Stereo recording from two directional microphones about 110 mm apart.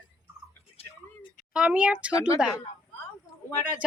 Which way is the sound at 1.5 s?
10° right (ahead or behind).